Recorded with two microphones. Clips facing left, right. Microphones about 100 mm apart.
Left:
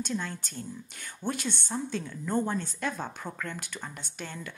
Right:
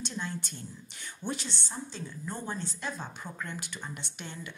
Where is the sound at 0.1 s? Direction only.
50° left (ahead or behind).